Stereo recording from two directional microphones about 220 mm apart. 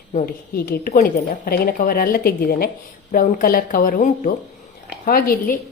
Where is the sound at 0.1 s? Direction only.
35° left (ahead or behind).